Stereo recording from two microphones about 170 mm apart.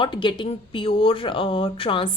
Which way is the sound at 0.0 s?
30° left (ahead or behind).